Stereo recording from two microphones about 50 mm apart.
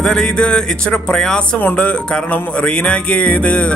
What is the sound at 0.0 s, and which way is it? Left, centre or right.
Speech, centre.